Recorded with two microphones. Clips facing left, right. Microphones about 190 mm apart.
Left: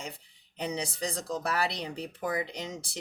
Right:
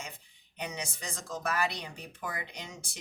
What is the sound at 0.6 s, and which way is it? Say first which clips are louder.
Speech: left 6 dB; 35° left (ahead or behind).